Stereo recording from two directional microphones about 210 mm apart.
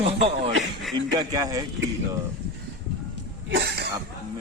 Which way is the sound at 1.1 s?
20° right (ahead or behind).